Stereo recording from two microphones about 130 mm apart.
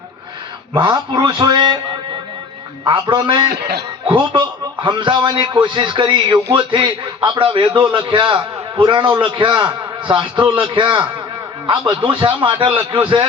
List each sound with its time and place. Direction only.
0.7 s a man's voice: 35° right (ahead or behind)
2.8 s a man's voice: 40° right (ahead or behind)
12.0 s a man's voice: 40° right (ahead or behind)